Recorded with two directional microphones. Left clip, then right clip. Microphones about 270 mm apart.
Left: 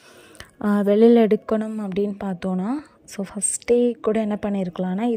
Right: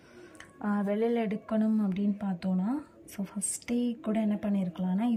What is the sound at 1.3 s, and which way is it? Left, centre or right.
A woman's voice, centre.